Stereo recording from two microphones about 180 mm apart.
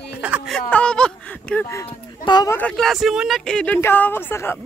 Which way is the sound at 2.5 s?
5° left (ahead or behind).